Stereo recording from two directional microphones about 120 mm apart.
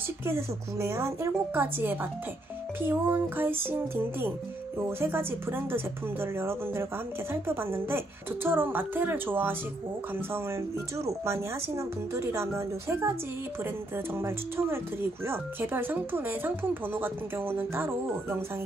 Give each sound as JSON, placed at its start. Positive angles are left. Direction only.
{"t": 0.2, "sound": "speech", "side_deg": -20}